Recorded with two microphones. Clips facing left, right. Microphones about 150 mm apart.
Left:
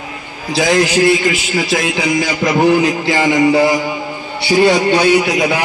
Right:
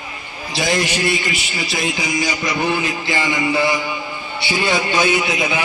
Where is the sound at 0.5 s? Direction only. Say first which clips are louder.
Left 7 dB; 75° left (ahead or behind).